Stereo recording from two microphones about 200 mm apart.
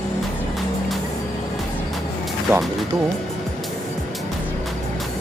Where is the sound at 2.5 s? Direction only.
15° right (ahead or behind).